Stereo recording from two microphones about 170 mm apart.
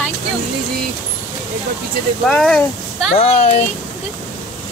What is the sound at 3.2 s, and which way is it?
Speech, 40° left (ahead or behind).